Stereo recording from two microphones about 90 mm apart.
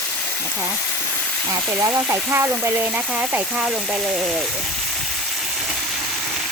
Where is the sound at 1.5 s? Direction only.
40° right (ahead or behind); by 4.2 s 10° right (ahead or behind).